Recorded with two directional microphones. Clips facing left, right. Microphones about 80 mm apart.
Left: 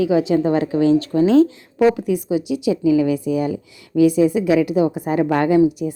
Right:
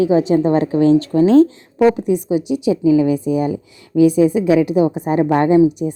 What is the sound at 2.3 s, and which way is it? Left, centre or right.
A woman's voice, right.